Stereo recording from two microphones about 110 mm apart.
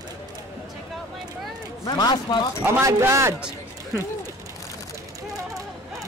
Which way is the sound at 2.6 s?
25° right (ahead or behind).